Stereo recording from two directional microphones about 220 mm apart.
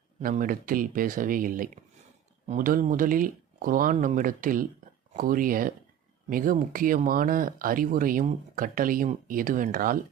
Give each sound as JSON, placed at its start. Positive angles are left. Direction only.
{"t": 0.2, "sound": "speech", "side_deg": -40}